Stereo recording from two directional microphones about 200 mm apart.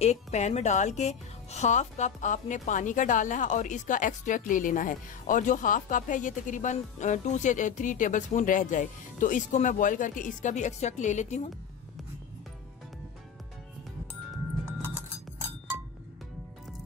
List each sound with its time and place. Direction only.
0.0 s speech: 35° left (ahead or behind)